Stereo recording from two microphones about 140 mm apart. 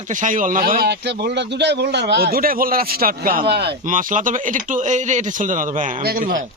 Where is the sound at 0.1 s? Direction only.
65° right (ahead or behind).